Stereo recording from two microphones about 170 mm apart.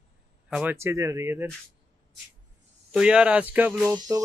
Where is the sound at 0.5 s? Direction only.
10° right (ahead or behind).